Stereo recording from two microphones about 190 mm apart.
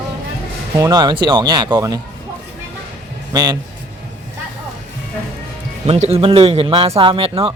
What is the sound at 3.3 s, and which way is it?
Speech, 20° right (ahead or behind).